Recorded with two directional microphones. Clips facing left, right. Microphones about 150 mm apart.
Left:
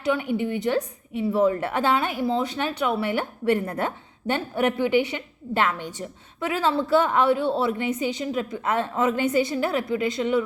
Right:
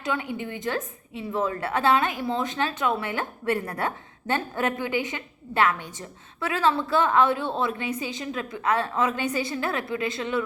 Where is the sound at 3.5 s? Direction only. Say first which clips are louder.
Left 4 dB; 20° left (ahead or behind).